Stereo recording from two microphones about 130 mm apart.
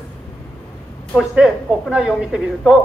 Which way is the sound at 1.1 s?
5° right (ahead or behind).